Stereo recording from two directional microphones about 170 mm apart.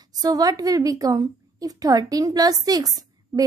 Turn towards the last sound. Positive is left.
turn(degrees=-20)  # may be behind; listen again after turning